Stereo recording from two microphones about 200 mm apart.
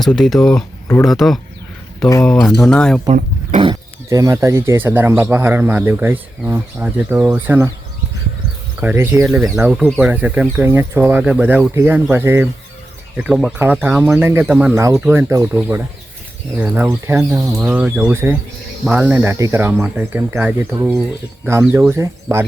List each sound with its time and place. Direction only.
0.0 s speech: centre (ahead or behind)
3.6 s speech: 20° right (ahead or behind)
8.8 s speech: 10° right (ahead or behind)